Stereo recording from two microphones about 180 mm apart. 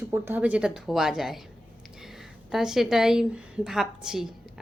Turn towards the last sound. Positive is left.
turn(degrees=-5)  # may be behind; listen again after turning